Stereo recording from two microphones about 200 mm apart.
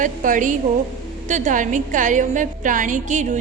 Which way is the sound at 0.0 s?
40° right (ahead or behind).